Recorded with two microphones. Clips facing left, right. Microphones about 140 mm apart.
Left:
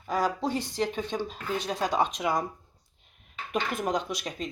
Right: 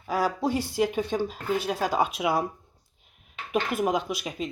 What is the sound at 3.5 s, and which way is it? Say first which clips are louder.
Speech: right 3 dB; 5° right (ahead or behind).